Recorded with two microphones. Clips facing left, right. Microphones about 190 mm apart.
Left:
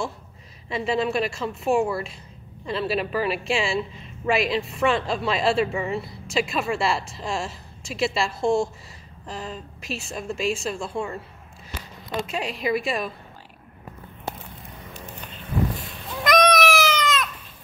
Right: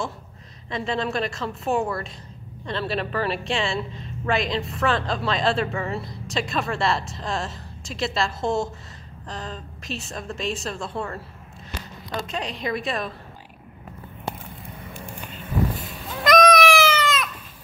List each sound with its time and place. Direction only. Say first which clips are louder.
0.7 s speech: left 2 dB; 5° left (ahead or behind)
12.1 s speech: left 2 dB; 5° left (ahead or behind)
15.0 s vehicle: right 1 dB; 10° right (ahead or behind)
15.8 s goat: right 2 dB; centre (ahead or behind)